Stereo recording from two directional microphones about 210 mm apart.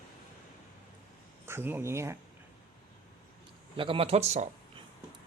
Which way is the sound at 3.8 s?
25° right (ahead or behind).